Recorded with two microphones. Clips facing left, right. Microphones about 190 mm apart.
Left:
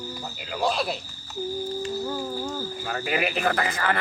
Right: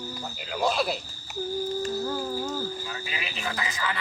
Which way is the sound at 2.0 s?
5° left (ahead or behind).